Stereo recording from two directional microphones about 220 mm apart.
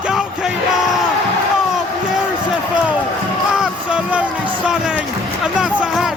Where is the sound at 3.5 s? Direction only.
5° right (ahead or behind).